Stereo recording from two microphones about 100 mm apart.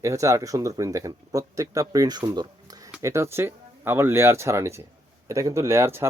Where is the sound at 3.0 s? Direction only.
30° right (ahead or behind).